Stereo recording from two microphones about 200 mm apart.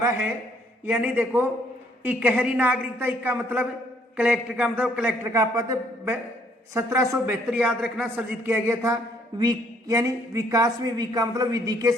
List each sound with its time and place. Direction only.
0.9 s a man's voice: 5° right (ahead or behind)